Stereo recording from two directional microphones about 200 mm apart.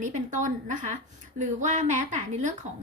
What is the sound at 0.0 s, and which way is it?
A woman's voice, 40° right (ahead or behind).